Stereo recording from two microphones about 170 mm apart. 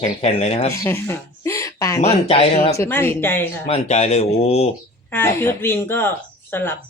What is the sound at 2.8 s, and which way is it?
Speech, 10° left (ahead or behind).